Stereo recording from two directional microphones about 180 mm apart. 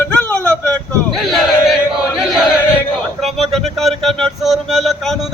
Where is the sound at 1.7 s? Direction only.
Centre (ahead or behind).